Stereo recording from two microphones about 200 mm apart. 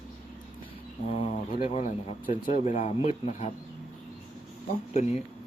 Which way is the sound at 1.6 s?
35° left (ahead or behind).